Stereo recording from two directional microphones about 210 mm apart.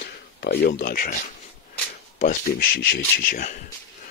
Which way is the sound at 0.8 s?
40° left (ahead or behind).